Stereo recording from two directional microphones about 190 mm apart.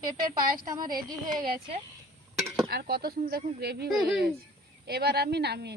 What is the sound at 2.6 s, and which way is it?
Speech, 55° right (ahead or behind).